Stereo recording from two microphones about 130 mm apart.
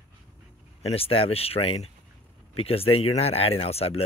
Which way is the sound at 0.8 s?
45° left (ahead or behind).